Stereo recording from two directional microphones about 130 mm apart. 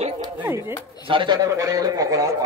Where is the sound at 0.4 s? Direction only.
20° right (ahead or behind).